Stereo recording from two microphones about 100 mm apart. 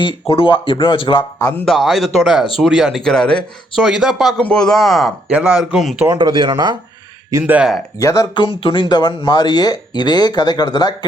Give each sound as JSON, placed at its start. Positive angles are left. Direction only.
{"t": 0.0, "sound": "speech", "side_deg": 60}
{"t": 1.6, "sound": "speech", "side_deg": 0}
{"t": 3.8, "sound": "speech", "side_deg": -5}
{"t": 5.3, "sound": "speech", "side_deg": -10}
{"t": 6.1, "sound": "speech", "side_deg": -55}
{"t": 7.4, "sound": "speech", "side_deg": -15}
{"t": 7.9, "sound": "speech", "side_deg": 35}
{"t": 8.4, "sound": "speech", "side_deg": 60}